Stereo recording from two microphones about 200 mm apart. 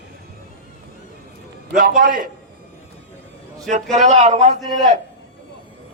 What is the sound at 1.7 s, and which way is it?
Speech, 50° right (ahead or behind).